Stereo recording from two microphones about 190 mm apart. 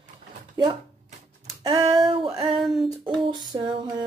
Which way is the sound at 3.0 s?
25° right (ahead or behind).